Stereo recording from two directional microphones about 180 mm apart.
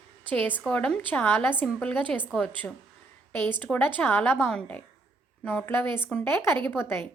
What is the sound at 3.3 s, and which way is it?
A woman's voice, 10° left (ahead or behind).